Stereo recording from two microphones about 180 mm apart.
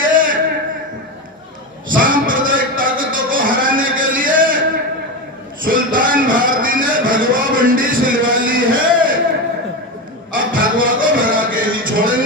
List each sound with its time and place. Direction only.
0.0 s a sound: 50° right (ahead or behind)
1.9 s music: 50° right (ahead or behind)
5.6 s a man's voice: 50° right (ahead or behind)
10.3 s music: 50° right (ahead or behind)